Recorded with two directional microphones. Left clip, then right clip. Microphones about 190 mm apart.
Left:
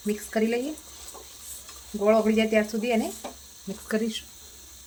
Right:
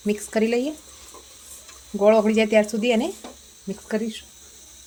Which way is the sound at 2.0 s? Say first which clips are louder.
Right 5 dB; 50° right (ahead or behind).